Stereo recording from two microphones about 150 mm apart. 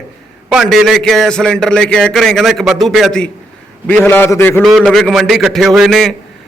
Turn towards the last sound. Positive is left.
turn(degrees=0)  # may be behind; listen again after turning